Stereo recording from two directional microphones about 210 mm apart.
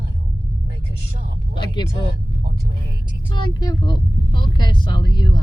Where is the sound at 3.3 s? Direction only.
20° left (ahead or behind).